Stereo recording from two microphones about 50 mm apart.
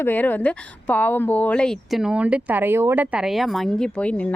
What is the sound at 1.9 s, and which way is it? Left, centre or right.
Speech, centre.